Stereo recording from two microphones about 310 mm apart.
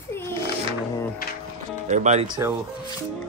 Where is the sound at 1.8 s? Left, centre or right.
Right.